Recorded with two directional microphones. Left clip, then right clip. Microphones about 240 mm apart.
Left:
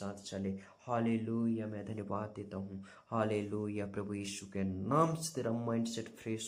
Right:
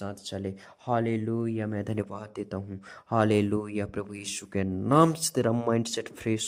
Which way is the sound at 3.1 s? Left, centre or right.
Right.